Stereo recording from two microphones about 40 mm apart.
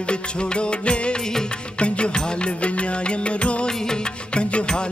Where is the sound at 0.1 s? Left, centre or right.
Left.